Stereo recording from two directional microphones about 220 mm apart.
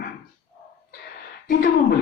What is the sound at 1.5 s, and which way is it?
Speech, 45° left (ahead or behind).